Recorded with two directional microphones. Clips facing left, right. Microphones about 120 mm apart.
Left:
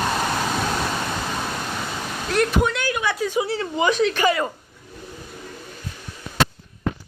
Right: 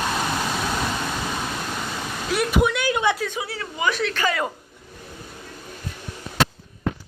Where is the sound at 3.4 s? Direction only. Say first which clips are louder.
Left 5 dB; 30° left (ahead or behind).